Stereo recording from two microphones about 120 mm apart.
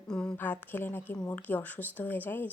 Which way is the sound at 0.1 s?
5° left (ahead or behind).